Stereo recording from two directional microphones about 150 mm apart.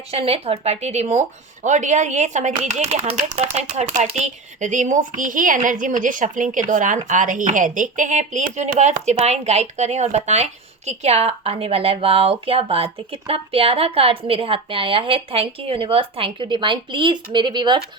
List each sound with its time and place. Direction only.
0.1 s speech: 40° right (ahead or behind); by 3.3 s 55° right (ahead or behind)
3.3 s speech: 45° right (ahead or behind); by 17.7 s 30° right (ahead or behind)